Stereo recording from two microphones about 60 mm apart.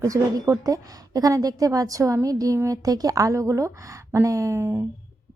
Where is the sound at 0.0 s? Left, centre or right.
Right.